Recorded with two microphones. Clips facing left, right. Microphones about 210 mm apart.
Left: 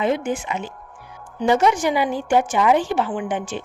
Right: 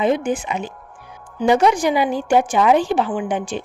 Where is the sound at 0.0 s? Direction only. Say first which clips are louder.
Right 3 dB; 15° right (ahead or behind).